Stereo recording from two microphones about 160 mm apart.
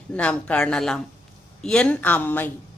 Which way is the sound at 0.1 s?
10° left (ahead or behind).